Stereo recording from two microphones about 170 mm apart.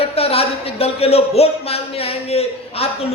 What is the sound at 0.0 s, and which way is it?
Speech, 35° left (ahead or behind).